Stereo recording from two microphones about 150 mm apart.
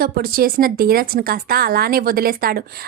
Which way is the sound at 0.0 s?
80° right.